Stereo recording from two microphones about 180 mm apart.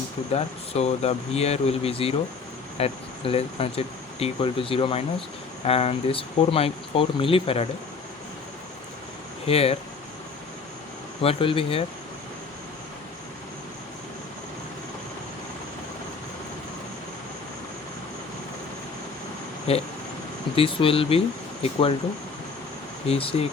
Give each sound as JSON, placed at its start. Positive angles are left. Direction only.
{"t": 0.3, "sound": "speech", "side_deg": 35}
{"t": 9.5, "sound": "speech", "side_deg": 35}
{"t": 11.2, "sound": "speech", "side_deg": 30}
{"t": 19.7, "sound": "speech", "side_deg": 30}
{"t": 23.0, "sound": "speech", "side_deg": 35}